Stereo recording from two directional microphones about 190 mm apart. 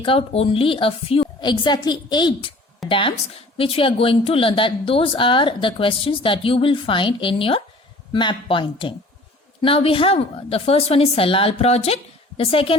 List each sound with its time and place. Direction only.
0.0 s a woman's voice: 30° left (ahead or behind)
2.8 s a sound: centre (ahead or behind)
3.6 s a woman's voice: 30° left (ahead or behind)